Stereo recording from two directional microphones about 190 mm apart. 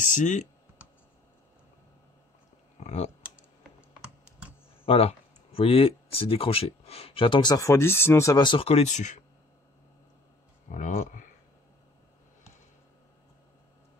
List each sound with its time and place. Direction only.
0.0 s speech: 40° left (ahead or behind)
2.8 s speech: 35° left (ahead or behind)
4.8 s speech: 30° left (ahead or behind)
10.7 s speech: 45° left (ahead or behind)